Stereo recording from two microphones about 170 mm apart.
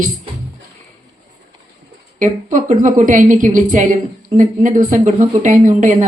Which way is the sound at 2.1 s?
50° right (ahead or behind).